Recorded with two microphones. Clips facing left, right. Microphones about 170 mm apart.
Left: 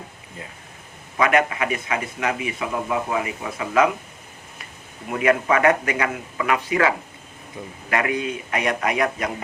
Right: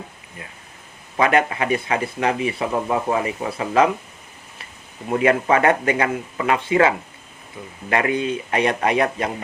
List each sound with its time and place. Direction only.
1.1 s speech: 30° right (ahead or behind)
5.1 s speech: 30° right (ahead or behind)